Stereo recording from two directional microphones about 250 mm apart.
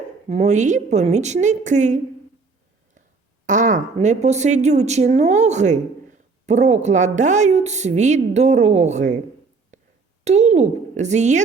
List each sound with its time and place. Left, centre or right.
0.3 s a woman's voice: right
3.4 s a woman's voice: right
10.2 s a woman's voice: right